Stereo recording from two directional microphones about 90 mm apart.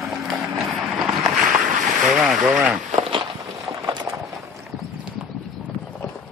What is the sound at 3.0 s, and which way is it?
Walk, 75° right (ahead or behind).